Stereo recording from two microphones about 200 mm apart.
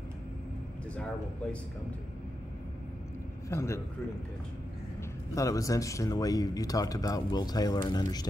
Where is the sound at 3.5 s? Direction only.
15° left (ahead or behind).